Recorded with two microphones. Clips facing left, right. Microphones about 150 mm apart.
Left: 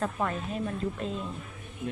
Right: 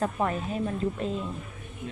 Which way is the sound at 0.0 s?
30° right (ahead or behind).